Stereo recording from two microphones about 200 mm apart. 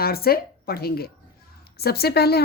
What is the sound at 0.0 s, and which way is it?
A woman's voice, 50° left (ahead or behind).